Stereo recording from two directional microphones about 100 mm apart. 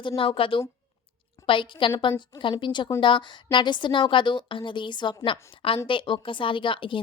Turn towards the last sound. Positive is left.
turn(degrees=60)  # may be behind; listen again after turning